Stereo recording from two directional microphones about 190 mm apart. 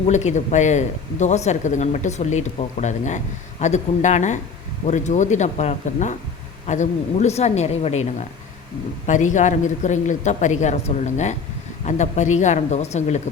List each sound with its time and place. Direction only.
0.1 s speech: 40° left (ahead or behind)
9.0 s speech: 40° left (ahead or behind)